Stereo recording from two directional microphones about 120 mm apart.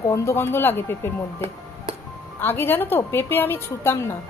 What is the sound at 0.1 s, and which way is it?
A woman's voice, 25° left (ahead or behind).